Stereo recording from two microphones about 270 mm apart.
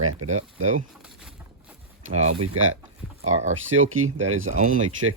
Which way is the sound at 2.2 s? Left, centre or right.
Right.